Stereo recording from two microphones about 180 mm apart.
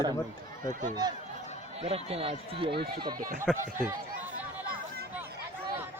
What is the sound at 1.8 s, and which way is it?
Speech, 35° right (ahead or behind).